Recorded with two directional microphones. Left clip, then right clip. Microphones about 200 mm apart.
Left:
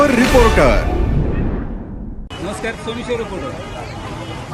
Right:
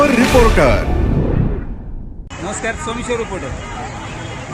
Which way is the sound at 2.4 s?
Centre (ahead or behind).